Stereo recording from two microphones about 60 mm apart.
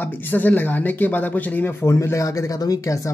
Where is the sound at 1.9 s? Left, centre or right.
Left.